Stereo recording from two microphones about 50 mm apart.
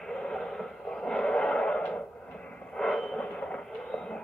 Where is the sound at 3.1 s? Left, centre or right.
Left.